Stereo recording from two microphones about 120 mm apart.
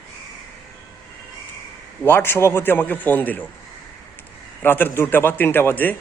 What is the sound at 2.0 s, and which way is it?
A man's voice, 20° left (ahead or behind).